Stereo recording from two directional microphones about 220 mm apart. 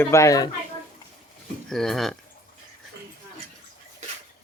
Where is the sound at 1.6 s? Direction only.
Centre (ahead or behind).